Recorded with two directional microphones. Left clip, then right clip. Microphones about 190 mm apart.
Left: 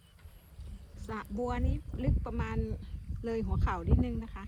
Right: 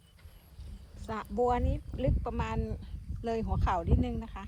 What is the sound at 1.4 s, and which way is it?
Speech, centre (ahead or behind).